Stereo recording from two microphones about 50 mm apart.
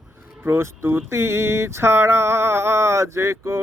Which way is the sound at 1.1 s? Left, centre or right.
Right.